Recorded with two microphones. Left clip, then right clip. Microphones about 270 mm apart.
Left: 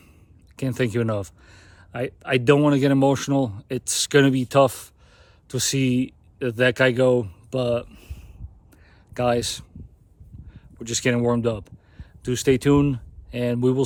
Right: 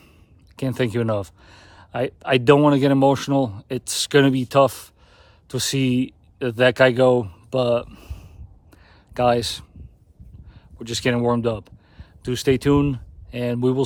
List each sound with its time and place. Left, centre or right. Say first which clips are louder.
0.5 s speech: right 1 dB; centre
8.7 s a sound: right 3 dB; centre
10.5 s speech: even; centre